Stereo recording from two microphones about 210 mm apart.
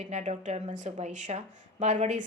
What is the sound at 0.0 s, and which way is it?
A woman's voice, 30° right (ahead or behind).